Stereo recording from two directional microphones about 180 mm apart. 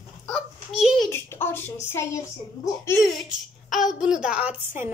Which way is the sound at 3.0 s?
Centre (ahead or behind).